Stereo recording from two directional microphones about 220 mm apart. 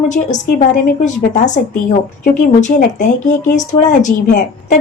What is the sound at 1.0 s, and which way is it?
Speech, 35° left (ahead or behind).